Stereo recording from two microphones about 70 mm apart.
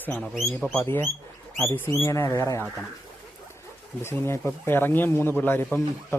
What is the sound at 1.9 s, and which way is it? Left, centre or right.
Speech, left.